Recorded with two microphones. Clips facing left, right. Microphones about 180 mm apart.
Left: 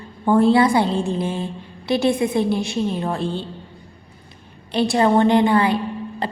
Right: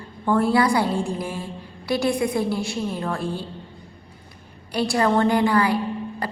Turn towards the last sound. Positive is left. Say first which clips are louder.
# left 1 dB
turn(degrees=25)  # may be behind; listen again after turning